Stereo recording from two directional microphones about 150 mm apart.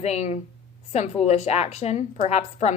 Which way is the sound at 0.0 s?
50° left (ahead or behind).